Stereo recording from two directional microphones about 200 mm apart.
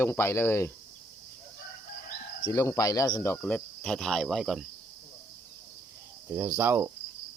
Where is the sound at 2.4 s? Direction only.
15° left (ahead or behind); by 4.7 s centre (ahead or behind).